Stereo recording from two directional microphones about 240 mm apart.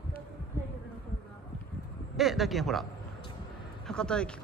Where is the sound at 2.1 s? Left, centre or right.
Centre.